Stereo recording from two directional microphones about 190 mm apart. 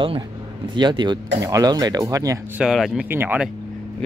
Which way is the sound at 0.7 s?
25° right (ahead or behind).